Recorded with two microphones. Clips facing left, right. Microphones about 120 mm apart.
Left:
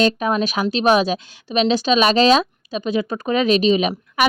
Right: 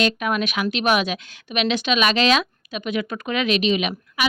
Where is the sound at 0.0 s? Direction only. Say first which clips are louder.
Left 4 dB; 30° left (ahead or behind).